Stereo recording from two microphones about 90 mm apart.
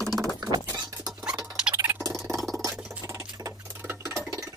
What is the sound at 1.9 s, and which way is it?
Frog, 15° right (ahead or behind).